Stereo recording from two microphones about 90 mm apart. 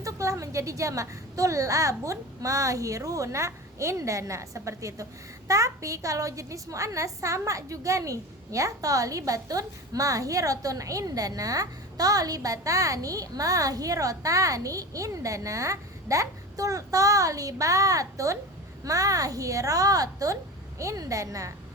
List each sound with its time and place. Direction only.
0.0 s a woman's voice: 35° right (ahead or behind)